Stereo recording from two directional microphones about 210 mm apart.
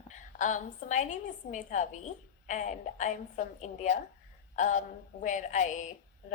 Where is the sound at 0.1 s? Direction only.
35° left (ahead or behind).